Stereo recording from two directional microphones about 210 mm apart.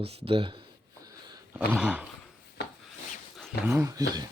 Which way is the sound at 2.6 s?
55° left (ahead or behind).